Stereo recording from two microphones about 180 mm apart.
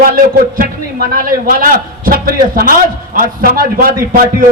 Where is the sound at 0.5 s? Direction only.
50° right (ahead or behind).